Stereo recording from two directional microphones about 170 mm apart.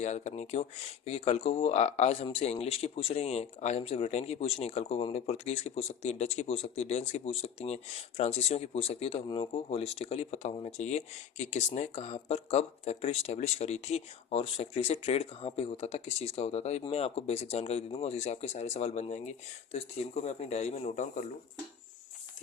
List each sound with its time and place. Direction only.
0.0 s speech: 40° left (ahead or behind)